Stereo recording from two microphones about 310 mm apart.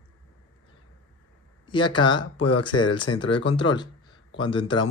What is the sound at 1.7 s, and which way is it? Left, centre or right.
Speech, centre.